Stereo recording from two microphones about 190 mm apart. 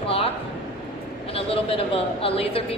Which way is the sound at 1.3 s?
30° left (ahead or behind).